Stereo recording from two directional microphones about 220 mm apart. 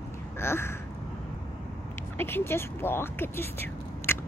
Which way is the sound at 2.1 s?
10° left (ahead or behind).